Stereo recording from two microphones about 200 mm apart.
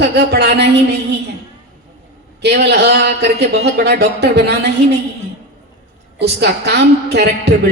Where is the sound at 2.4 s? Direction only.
55° right (ahead or behind).